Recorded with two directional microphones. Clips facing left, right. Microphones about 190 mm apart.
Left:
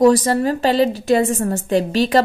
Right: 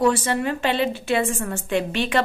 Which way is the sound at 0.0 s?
40° left (ahead or behind).